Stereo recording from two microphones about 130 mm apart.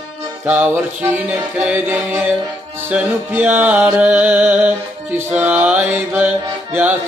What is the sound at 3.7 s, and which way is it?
Music, 5° right (ahead or behind).